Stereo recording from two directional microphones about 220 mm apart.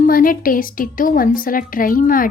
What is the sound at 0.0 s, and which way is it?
A woman's voice, 40° left (ahead or behind).